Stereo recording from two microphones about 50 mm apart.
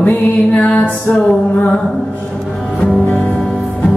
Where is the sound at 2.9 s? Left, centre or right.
Left.